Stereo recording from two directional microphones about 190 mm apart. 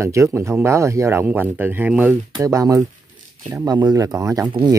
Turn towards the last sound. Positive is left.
turn(degrees=-20)  # may be behind; listen again after turning